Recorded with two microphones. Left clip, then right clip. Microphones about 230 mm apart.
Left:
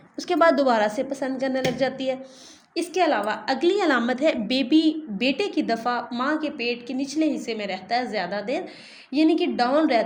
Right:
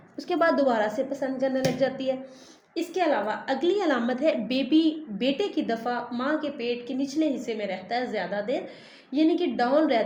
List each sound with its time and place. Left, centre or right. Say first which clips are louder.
0.2 s a woman's voice: left 4 dB; left